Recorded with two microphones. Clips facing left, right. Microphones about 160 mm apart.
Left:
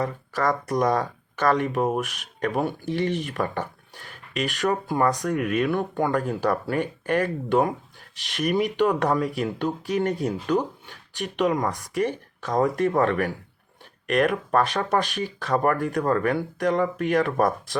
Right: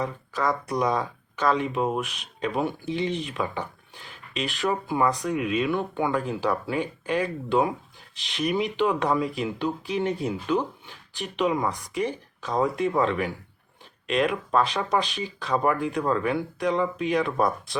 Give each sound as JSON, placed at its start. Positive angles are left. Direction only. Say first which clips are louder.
{"t": 0.0, "sound": "speech", "louder": "left 2 dB", "side_deg": 50}